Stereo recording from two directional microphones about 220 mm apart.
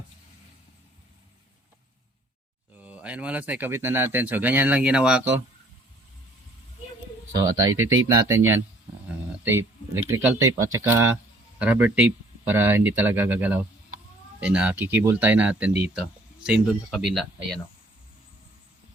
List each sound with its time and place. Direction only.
2.8 s speech: 5° right (ahead or behind)
7.3 s speech: 15° right (ahead or behind); by 17.6 s centre (ahead or behind)